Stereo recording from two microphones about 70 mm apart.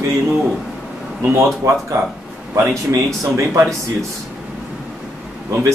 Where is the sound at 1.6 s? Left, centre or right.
Right.